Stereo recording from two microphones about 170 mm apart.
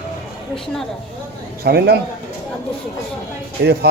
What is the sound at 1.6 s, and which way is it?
Speech, 70° right (ahead or behind).